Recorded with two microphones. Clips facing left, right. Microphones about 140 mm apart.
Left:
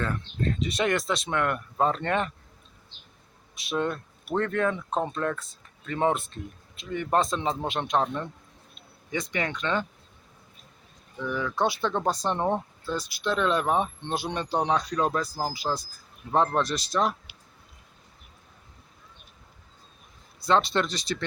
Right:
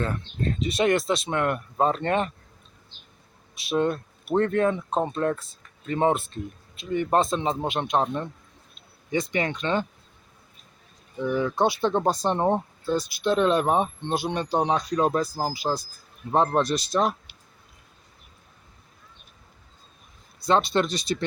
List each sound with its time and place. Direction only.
0.8 s speech: 25° right (ahead or behind)
3.7 s speech: 25° right (ahead or behind)
4.9 s speech: 15° right (ahead or behind)
5.1 s speech: 30° right (ahead or behind)
11.2 s speech: 25° right (ahead or behind)
20.5 s speech: 15° right (ahead or behind)